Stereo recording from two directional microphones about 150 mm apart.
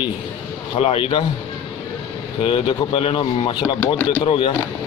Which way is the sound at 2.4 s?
35° left (ahead or behind).